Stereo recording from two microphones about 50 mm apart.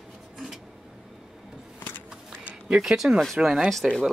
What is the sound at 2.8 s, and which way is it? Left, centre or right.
Speech, centre.